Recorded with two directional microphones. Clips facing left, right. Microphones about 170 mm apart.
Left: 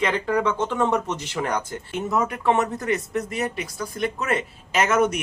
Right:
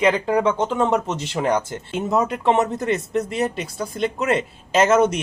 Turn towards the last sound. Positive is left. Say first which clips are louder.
# right 4 dB
turn(degrees=-25)  # may be behind; listen again after turning